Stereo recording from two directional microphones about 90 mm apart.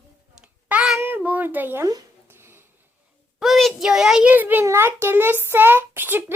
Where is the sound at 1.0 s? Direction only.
25° right (ahead or behind).